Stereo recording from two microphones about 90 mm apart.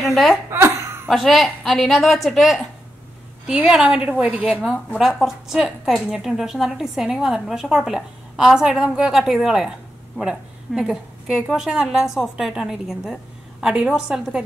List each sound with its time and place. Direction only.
0.0 s speech: centre (ahead or behind)
0.5 s a sound: 30° right (ahead or behind)
1.0 s a woman's voice: centre (ahead or behind)